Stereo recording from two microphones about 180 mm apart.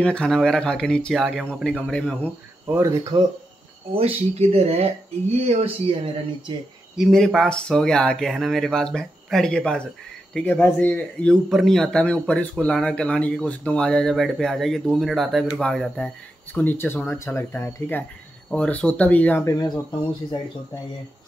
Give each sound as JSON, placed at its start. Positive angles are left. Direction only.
{"t": 0.0, "sound": "speech", "side_deg": 5}
{"t": 2.7, "sound": "speech", "side_deg": -15}
{"t": 3.9, "sound": "speech", "side_deg": -35}
{"t": 7.0, "sound": "speech", "side_deg": 0}